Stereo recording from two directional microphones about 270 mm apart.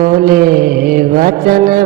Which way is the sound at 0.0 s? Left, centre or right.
Right.